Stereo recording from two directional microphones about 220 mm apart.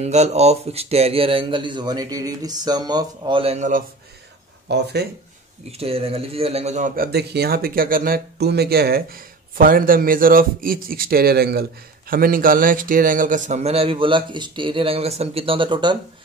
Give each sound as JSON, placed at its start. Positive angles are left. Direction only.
{"t": 0.0, "sound": "a man's voice", "side_deg": -30}
{"t": 4.6, "sound": "speech", "side_deg": -50}
{"t": 5.7, "sound": "a man's voice", "side_deg": -25}
{"t": 7.1, "sound": "a man's voice", "side_deg": -45}